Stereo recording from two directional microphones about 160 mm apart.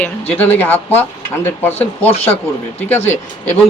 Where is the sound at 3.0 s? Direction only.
45° left (ahead or behind).